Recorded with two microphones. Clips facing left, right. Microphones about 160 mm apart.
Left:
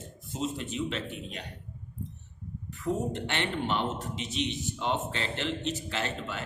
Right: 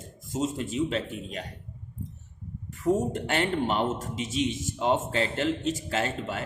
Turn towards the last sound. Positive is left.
turn(degrees=-40)  # may be behind; listen again after turning